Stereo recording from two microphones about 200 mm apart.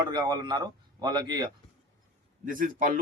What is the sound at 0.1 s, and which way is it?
Speech, 20° right (ahead or behind).